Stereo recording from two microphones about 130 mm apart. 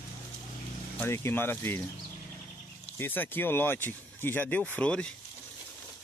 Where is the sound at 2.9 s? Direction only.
15° left (ahead or behind).